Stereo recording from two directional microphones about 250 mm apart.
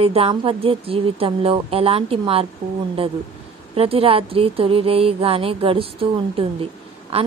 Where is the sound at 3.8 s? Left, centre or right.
Right.